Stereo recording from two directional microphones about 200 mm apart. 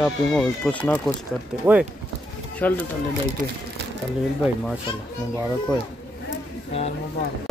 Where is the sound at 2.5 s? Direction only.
5° left (ahead or behind).